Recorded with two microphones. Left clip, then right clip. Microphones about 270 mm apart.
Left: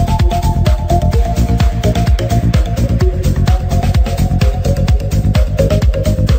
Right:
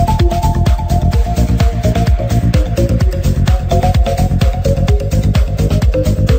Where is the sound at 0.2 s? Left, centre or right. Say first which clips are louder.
Right 1 dB; centre.